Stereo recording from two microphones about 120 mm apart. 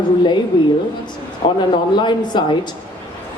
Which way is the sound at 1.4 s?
45° left (ahead or behind).